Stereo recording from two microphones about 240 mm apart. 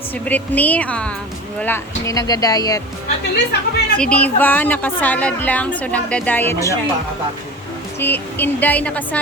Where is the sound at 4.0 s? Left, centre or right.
Centre.